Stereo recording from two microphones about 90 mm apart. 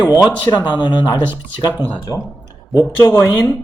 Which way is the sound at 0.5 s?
55° left (ahead or behind).